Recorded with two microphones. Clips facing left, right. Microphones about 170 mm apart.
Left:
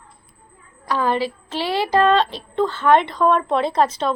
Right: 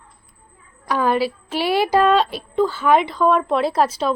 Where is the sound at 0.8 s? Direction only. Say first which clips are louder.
Right 2 dB; 15° right (ahead or behind).